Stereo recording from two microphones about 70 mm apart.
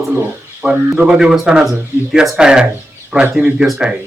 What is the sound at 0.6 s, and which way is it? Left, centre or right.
A man's voice, centre.